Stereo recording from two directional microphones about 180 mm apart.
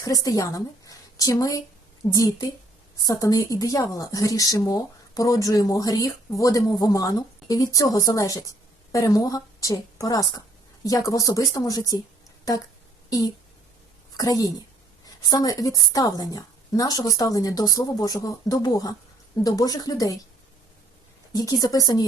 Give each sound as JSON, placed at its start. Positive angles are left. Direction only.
{"t": 0.0, "sound": "a woman's voice", "side_deg": 20}
{"t": 14.2, "sound": "a woman's voice", "side_deg": 20}
{"t": 21.3, "sound": "a woman's voice", "side_deg": 20}